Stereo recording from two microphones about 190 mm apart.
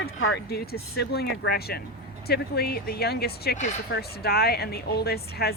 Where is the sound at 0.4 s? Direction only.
55° left (ahead or behind).